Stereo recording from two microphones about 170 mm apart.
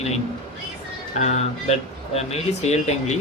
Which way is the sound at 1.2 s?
40° left (ahead or behind).